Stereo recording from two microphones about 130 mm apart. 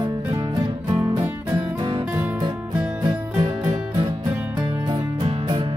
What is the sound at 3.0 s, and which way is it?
Music, 50° right (ahead or behind).